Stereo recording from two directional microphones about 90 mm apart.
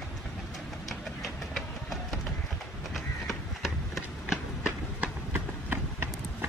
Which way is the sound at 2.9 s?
Centre (ahead or behind).